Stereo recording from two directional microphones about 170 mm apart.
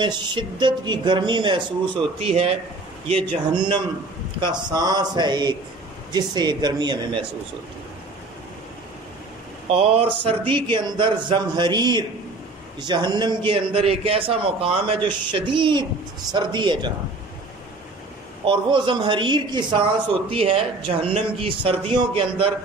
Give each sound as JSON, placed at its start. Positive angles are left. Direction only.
{"t": 0.0, "sound": "a man's voice", "side_deg": -25}
{"t": 9.7, "sound": "a man's voice", "side_deg": -35}
{"t": 18.4, "sound": "a man's voice", "side_deg": -30}